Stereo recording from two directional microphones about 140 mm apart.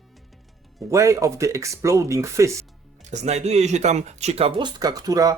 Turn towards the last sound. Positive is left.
turn(degrees=-25)  # may be behind; listen again after turning